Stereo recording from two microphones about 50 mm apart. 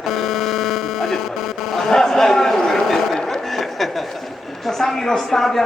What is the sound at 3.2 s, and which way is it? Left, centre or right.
Chuckle, centre.